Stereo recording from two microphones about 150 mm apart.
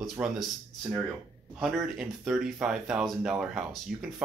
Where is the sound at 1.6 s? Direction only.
Centre (ahead or behind).